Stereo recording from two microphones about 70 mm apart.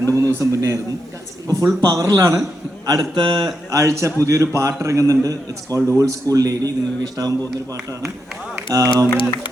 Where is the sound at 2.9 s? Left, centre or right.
Right.